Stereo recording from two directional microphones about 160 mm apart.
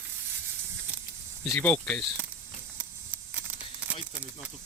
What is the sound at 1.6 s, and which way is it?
Speech, 10° left (ahead or behind).